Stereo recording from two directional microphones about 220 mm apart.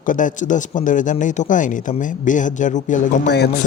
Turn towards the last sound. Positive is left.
turn(degrees=50)  # may be behind; listen again after turning